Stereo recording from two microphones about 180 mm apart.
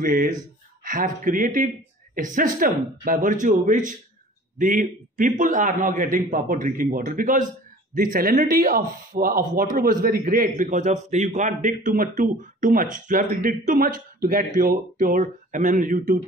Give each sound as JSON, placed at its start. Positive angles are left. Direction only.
{"t": 0.0, "sound": "a man's voice", "side_deg": -50}